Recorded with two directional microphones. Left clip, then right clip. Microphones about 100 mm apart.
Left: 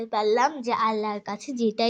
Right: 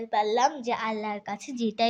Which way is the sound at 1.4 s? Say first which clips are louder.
Left 2 dB; 5° left (ahead or behind).